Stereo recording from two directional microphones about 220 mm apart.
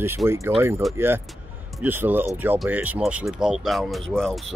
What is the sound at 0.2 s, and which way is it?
Speech, 15° right (ahead or behind).